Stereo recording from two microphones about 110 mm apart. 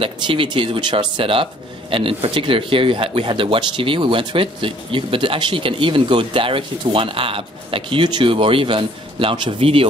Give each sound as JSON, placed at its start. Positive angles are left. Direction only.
{"t": 0.0, "sound": "a man's voice", "side_deg": -55}